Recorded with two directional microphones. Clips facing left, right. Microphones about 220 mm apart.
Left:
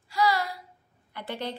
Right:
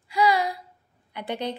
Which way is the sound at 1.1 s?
15° right (ahead or behind).